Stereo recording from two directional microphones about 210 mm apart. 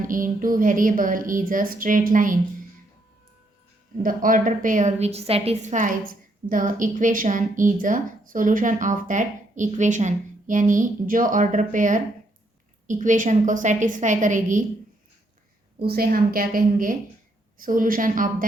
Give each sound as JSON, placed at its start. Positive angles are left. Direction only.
{"t": 0.0, "sound": "a woman's voice", "side_deg": -40}
{"t": 4.0, "sound": "a woman's voice", "side_deg": -40}
{"t": 15.9, "sound": "a woman's voice", "side_deg": -45}